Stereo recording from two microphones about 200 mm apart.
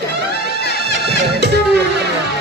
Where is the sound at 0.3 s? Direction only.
60° right (ahead or behind).